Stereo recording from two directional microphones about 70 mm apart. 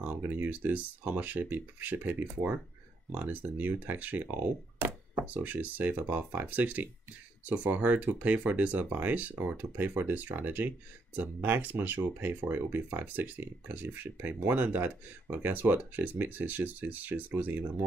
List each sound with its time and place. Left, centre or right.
0.0 s speech: right
4.7 s a sound: right
5.2 s speech: right